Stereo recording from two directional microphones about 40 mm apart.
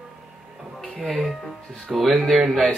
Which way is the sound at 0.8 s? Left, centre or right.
Centre.